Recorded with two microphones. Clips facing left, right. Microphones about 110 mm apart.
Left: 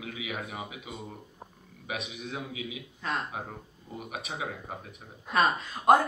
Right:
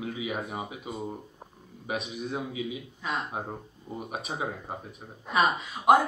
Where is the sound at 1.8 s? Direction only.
40° right (ahead or behind).